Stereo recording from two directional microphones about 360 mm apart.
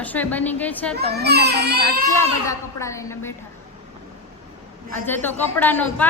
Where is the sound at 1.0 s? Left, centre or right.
Right.